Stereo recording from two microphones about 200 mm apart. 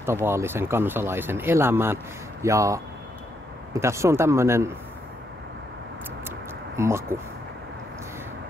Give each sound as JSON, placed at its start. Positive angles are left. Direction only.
{"t": 0.0, "sound": "speech", "side_deg": -15}
{"t": 6.8, "sound": "speech", "side_deg": -15}